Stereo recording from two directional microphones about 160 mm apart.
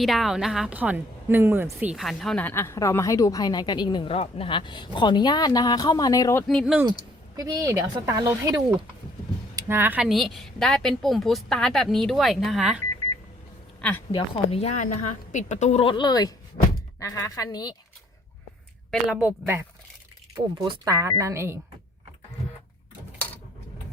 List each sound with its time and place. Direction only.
0.0 s speech: centre (ahead or behind); by 6.4 s 20° left (ahead or behind)
6.5 s a woman's voice: 5° left (ahead or behind)
7.3 s a woman's voice: 20° right (ahead or behind); by 12.8 s 5° right (ahead or behind)
14.1 s a woman's voice: 35° left (ahead or behind)
18.9 s speech: 10° right (ahead or behind)
20.3 s speech: 20° right (ahead or behind)